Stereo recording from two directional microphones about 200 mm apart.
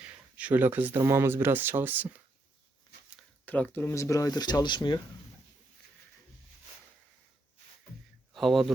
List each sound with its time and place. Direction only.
0.0 s speech: 5° right (ahead or behind)
3.4 s speech: 10° left (ahead or behind)
8.3 s speech: centre (ahead or behind)